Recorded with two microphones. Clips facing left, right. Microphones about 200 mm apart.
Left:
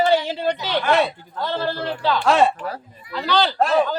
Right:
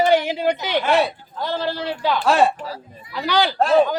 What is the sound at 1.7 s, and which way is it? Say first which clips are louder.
Speech: even; 50° left (ahead or behind).